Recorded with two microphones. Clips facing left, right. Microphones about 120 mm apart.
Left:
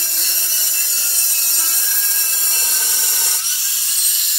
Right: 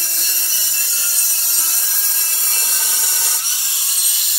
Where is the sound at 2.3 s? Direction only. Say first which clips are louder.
Even; centre (ahead or behind).